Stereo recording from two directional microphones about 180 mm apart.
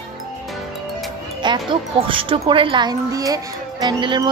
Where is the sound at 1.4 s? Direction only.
25° right (ahead or behind).